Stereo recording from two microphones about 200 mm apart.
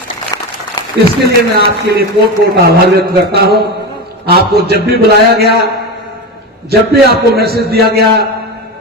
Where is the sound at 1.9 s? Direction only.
55° right (ahead or behind).